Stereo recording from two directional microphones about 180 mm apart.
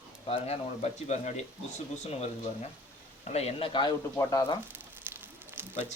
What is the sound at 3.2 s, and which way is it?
Speech, 35° left (ahead or behind).